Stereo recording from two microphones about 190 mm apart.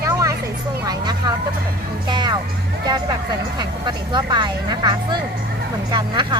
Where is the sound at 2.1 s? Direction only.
25° right (ahead or behind).